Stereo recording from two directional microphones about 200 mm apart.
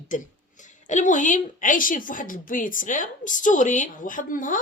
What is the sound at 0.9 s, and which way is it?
A woman's voice, 40° left (ahead or behind).